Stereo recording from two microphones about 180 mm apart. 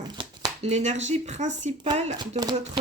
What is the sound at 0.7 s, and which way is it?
Speech, 40° right (ahead or behind).